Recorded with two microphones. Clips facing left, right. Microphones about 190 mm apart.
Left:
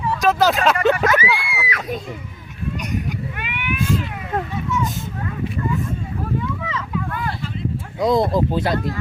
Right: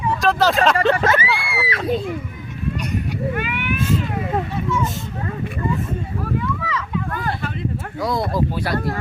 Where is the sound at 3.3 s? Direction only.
40° right (ahead or behind).